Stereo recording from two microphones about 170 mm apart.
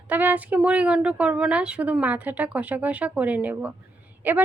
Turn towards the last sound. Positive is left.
turn(degrees=-10)  # may be behind; listen again after turning